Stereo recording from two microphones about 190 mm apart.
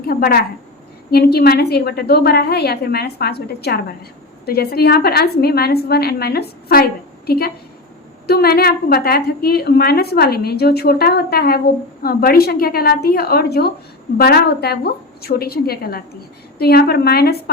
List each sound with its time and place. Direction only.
0.0 s a woman's voice: 50° left (ahead or behind)